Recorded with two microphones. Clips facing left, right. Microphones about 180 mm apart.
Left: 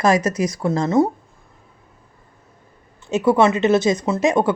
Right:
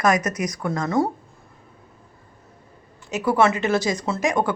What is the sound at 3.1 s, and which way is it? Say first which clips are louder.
Speech: left 4 dB; 25° left (ahead or behind).